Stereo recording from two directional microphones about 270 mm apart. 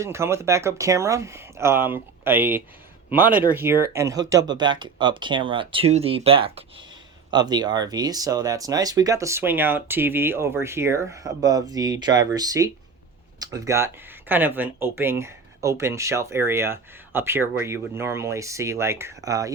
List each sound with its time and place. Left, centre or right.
0.0 s speech: centre